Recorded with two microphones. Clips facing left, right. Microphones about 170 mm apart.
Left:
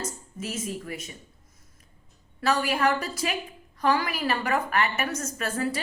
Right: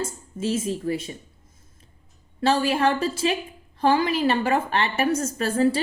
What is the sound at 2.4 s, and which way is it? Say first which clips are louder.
A woman's voice: right 4 dB; 25° right (ahead or behind).